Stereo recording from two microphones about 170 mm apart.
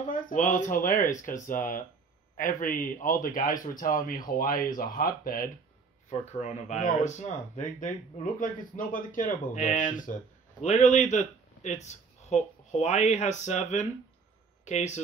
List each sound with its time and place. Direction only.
0.1 s speech: 50° left (ahead or behind)
6.0 s speech: 45° left (ahead or behind)